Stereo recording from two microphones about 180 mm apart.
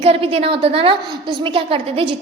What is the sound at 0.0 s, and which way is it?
A woman's voice, 30° right (ahead or behind).